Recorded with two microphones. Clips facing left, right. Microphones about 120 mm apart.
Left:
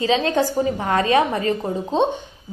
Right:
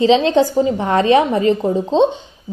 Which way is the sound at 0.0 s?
25° right (ahead or behind).